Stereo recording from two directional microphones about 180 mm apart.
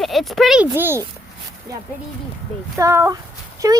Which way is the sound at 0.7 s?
15° right (ahead or behind).